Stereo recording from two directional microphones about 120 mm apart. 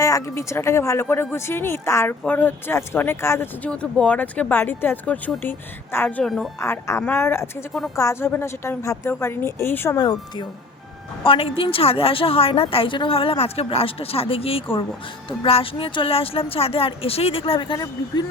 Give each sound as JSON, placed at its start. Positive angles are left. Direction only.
{"t": 0.0, "sound": "speech", "side_deg": 25}
{"t": 6.6, "sound": "speech", "side_deg": 25}
{"t": 10.0, "sound": "speech", "side_deg": 35}
{"t": 11.2, "sound": "a woman's voice", "side_deg": 50}